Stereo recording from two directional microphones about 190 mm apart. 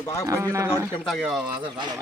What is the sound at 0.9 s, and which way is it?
Speech, centre (ahead or behind).